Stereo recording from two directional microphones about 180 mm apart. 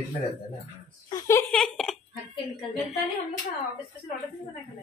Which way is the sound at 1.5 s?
5° left (ahead or behind).